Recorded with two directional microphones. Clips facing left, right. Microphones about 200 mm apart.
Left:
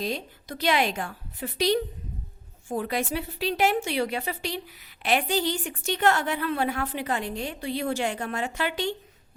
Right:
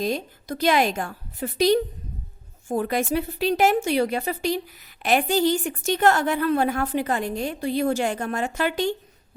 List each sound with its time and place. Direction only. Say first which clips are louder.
0.0 s a woman's voice: right 5 dB; 45° right (ahead or behind)